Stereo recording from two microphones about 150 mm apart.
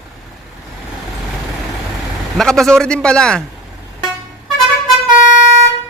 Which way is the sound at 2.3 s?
5° left (ahead or behind).